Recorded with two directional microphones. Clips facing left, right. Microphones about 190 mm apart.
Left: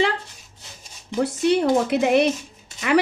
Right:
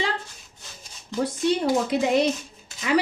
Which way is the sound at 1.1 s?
70° left (ahead or behind).